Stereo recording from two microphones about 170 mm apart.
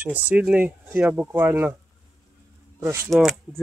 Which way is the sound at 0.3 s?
10° right (ahead or behind).